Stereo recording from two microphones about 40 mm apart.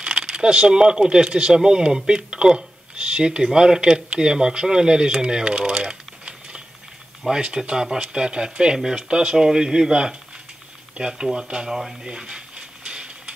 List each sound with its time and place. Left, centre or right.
0.0 s speech: right
11.7 s speech: centre
12.1 s a sound: centre